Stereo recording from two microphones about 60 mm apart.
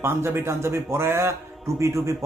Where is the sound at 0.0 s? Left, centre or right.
Right.